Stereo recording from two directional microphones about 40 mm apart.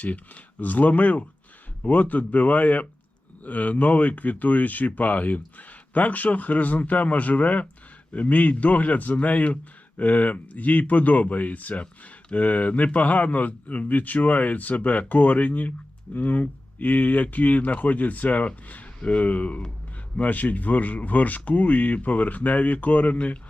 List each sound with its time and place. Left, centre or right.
0.6 s speech: left